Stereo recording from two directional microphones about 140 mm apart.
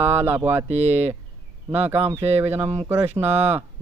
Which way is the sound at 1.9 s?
45° right (ahead or behind).